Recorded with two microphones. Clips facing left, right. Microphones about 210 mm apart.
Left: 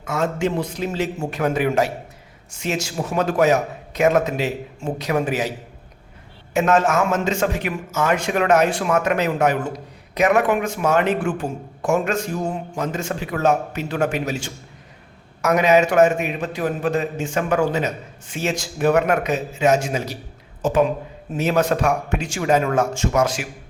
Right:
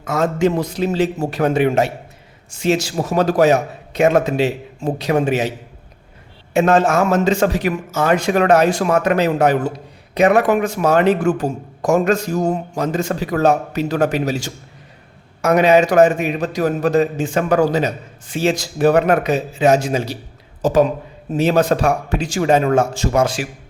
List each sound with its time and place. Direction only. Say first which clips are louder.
0.0 s a man's voice: right 5 dB; 40° right (ahead or behind)